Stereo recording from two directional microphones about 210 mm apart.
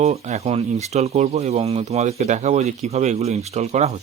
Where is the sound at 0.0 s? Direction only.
30° right (ahead or behind).